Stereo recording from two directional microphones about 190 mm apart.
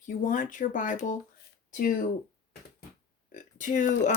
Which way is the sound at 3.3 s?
40° left (ahead or behind).